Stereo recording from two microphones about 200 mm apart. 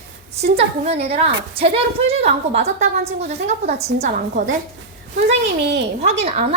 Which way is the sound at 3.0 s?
35° right (ahead or behind).